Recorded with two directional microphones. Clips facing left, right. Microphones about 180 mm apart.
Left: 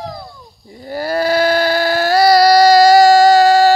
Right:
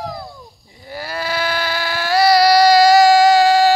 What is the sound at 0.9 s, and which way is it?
Baby cry, 40° left (ahead or behind).